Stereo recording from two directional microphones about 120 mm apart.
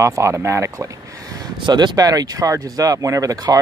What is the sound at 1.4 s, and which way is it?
Speech, 35° right (ahead or behind).